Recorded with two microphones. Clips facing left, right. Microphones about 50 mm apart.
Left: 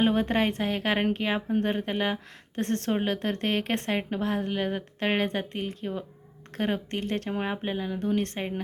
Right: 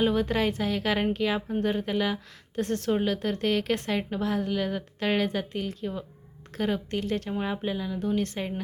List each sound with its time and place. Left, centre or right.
0.0 s a woman's voice: left
7.9 s a woman's voice: left